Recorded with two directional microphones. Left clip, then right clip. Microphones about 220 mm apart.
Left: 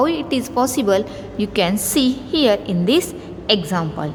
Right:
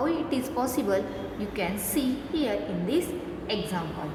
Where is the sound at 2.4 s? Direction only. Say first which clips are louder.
Left 15 dB; 45° left (ahead or behind).